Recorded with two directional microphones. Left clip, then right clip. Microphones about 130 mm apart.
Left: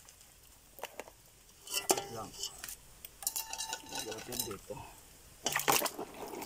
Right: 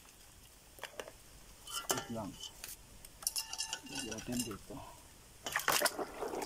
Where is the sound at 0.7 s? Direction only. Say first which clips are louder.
Left 1 dB; 25° left (ahead or behind).